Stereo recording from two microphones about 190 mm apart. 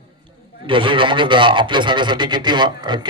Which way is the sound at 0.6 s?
25° right (ahead or behind).